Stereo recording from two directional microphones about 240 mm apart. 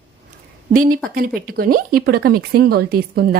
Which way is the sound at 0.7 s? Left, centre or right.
Right.